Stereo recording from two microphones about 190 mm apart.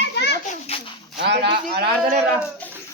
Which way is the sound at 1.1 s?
60° right (ahead or behind).